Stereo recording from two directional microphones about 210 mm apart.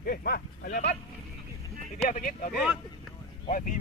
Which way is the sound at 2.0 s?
40° left (ahead or behind).